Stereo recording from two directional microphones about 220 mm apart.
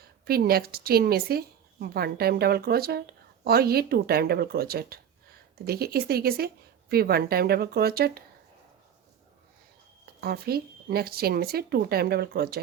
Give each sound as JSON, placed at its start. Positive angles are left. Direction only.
{"t": 0.0, "sound": "speech", "side_deg": -45}
{"t": 10.2, "sound": "speech", "side_deg": -45}